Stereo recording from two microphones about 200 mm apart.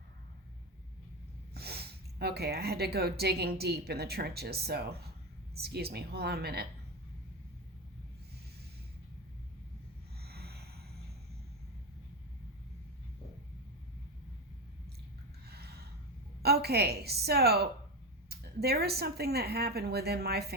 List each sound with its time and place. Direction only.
1.5 s a woman's voice: 55° right (ahead or behind)
10.2 s snort: 50° right (ahead or behind)
15.4 s gasp: 55° right (ahead or behind)
16.4 s a woman's voice: 55° right (ahead or behind)